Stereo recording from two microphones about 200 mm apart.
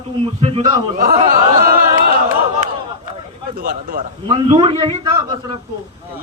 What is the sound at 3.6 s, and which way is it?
Speech, 45° right (ahead or behind).